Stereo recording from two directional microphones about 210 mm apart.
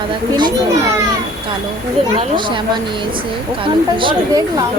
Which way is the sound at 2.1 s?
20° right (ahead or behind).